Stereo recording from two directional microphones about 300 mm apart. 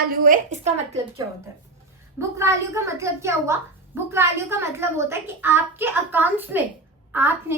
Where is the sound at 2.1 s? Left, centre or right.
Centre.